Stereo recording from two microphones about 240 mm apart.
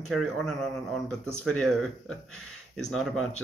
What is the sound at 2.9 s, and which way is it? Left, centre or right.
Speech, centre.